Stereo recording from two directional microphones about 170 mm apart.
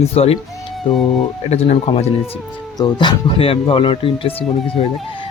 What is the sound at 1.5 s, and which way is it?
Speech, 40° left (ahead or behind).